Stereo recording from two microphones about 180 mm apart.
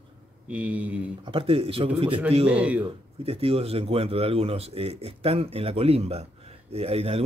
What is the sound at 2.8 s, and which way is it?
Speech, 30° right (ahead or behind).